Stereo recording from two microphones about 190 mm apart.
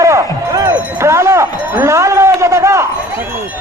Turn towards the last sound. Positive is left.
turn(degrees=-15)  # may be behind; listen again after turning